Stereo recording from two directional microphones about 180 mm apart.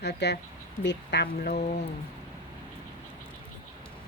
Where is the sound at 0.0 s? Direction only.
70° left (ahead or behind).